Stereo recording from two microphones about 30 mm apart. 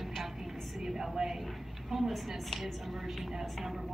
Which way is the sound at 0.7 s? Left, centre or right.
Centre.